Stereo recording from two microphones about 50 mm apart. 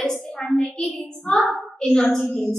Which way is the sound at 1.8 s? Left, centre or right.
Left.